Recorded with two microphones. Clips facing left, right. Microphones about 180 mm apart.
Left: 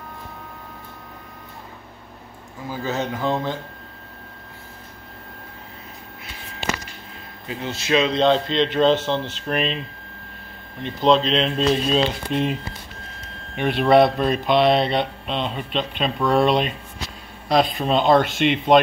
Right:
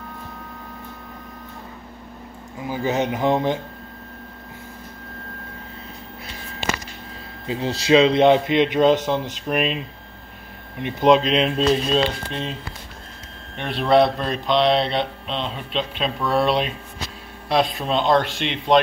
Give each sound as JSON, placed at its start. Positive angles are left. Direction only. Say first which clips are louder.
{"t": 2.7, "sound": "speech", "louder": "right 3 dB", "side_deg": -15}
{"t": 7.4, "sound": "speech", "louder": "right 5 dB", "side_deg": -30}
{"t": 11.0, "sound": "speech", "louder": "right 2 dB", "side_deg": -5}
{"t": 12.3, "sound": "speech", "louder": "left 7 dB", "side_deg": 15}
{"t": 13.6, "sound": "speech", "louder": "left 2 dB", "side_deg": 0}